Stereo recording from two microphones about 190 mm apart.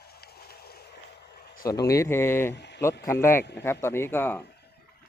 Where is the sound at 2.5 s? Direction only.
65° left (ahead or behind).